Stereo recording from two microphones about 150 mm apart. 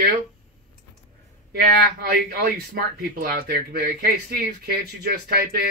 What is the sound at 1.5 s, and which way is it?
Speech, 80° right.